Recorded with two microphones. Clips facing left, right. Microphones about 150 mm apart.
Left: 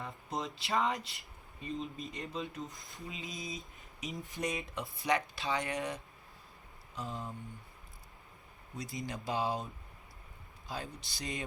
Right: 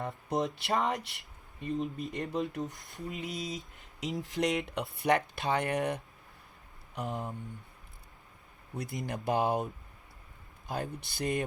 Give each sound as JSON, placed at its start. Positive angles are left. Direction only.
{"t": 0.3, "sound": "speech", "side_deg": -55}
{"t": 1.6, "sound": "speech", "side_deg": -60}
{"t": 2.6, "sound": "a sound", "side_deg": -65}
{"t": 3.8, "sound": "speech", "side_deg": -90}
{"t": 7.1, "sound": "speech", "side_deg": -20}
{"t": 8.7, "sound": "speech", "side_deg": -55}
{"t": 10.7, "sound": "speech", "side_deg": -55}